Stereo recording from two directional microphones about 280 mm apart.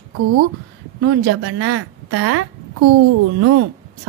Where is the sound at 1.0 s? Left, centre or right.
Right.